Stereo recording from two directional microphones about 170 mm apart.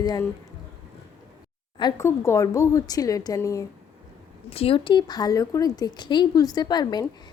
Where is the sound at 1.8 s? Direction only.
20° left (ahead or behind).